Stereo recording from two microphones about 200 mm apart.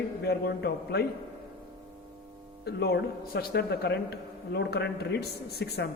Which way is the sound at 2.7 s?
55° left (ahead or behind).